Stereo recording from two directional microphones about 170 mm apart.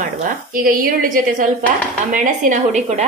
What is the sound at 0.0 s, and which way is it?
A woman's voice, 55° right (ahead or behind).